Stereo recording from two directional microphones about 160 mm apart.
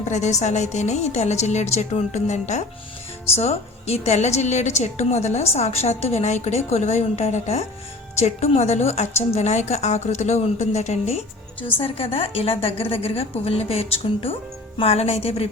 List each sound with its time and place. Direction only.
0.0 s a woman's voice: 45° left (ahead or behind)